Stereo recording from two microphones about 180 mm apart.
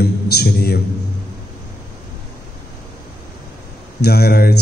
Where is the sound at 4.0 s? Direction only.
60° left (ahead or behind).